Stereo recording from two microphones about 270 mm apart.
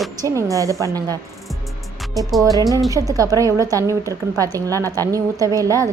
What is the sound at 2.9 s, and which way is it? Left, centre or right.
A woman's voice, centre.